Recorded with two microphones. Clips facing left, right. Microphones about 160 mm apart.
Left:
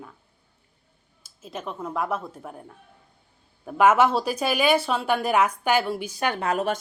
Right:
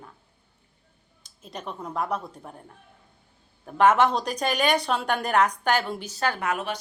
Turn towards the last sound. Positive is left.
turn(degrees=35)  # may be behind; listen again after turning